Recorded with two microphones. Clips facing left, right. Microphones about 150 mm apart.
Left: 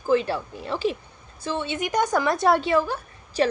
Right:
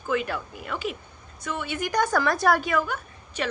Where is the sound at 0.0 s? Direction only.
30° left (ahead or behind).